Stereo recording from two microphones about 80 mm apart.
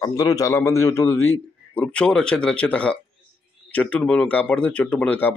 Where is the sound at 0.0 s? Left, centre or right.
Left.